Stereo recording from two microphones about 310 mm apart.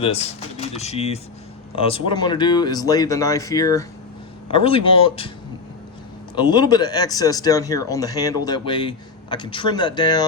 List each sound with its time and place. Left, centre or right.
0.0 s speech: centre
6.3 s speech: centre